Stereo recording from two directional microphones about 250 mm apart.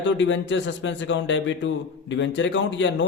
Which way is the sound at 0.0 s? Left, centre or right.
Left.